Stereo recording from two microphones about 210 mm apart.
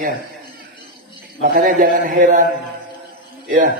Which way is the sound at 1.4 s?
40° right (ahead or behind).